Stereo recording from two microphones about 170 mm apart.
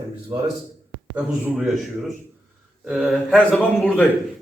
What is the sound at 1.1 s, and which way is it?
A man's voice, 5° right (ahead or behind).